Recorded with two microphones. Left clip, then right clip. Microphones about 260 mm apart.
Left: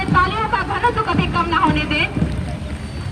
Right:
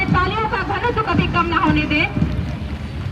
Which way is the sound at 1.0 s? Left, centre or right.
Left.